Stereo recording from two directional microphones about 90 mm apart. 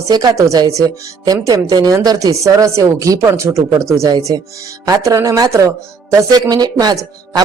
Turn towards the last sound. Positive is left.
turn(degrees=-45)  # may be behind; listen again after turning